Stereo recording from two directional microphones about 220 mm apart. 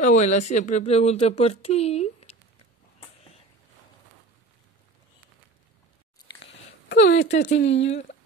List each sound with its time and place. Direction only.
0.0 s speech: 35° left (ahead or behind)
6.9 s a sound: 45° left (ahead or behind)
7.4 s speech: 55° left (ahead or behind)
7.8 s speech: 30° left (ahead or behind)